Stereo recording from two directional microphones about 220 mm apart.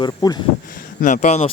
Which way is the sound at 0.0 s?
20° left (ahead or behind).